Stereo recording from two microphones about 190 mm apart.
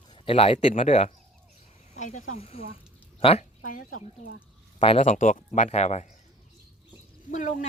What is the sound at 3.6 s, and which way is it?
Speech, 45° left (ahead or behind).